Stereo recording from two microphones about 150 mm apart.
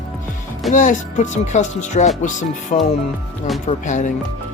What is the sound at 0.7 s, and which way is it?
Speech, 60° left (ahead or behind).